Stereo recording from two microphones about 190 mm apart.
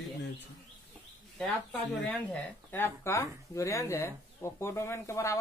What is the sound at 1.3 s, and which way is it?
Speech, 5° left (ahead or behind).